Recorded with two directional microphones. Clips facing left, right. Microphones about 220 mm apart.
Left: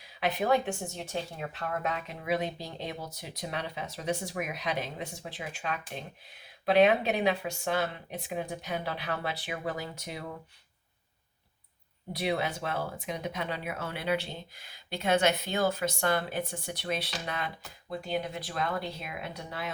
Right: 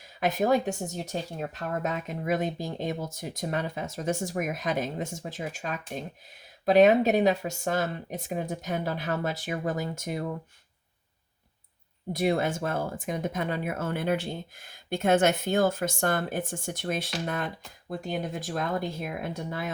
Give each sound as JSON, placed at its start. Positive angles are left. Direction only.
{"t": 0.2, "sound": "speech", "side_deg": -45}
{"t": 12.1, "sound": "speech", "side_deg": -45}